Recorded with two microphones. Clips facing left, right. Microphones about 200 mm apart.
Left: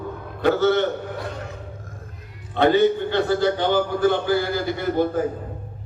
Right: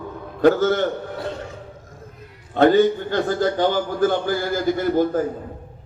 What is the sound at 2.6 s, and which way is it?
A man's voice, 45° right (ahead or behind).